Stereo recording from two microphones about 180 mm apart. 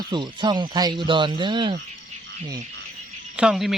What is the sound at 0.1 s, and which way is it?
Speech, 25° right (ahead or behind).